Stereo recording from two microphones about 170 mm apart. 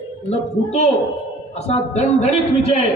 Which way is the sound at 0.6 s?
40° left (ahead or behind).